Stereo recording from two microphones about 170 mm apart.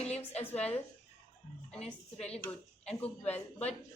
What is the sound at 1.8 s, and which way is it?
Speech, 40° left (ahead or behind).